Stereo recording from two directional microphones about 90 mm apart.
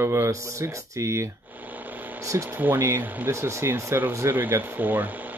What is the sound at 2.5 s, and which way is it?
Speech, 20° right (ahead or behind).